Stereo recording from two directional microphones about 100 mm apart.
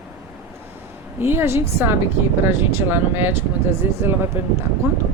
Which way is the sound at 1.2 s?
25° right (ahead or behind).